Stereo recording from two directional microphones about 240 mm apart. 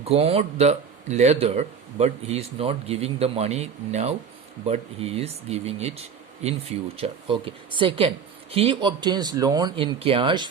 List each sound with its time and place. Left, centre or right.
0.0 s speech: right